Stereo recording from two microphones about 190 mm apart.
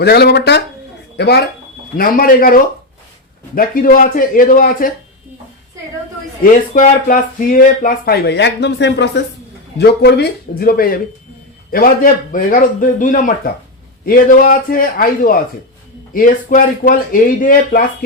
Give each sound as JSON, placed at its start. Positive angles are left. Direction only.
{"t": 0.0, "sound": "speech", "side_deg": 60}
{"t": 2.0, "sound": "speech", "side_deg": 50}
{"t": 6.4, "sound": "speech", "side_deg": 45}